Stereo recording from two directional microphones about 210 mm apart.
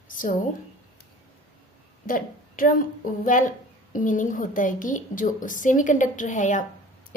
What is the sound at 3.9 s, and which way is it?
A woman's voice, 40° left (ahead or behind).